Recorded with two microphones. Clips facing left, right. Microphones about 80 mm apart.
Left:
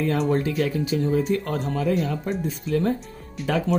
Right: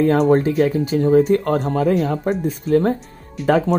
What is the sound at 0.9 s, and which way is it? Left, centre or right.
Speech, right.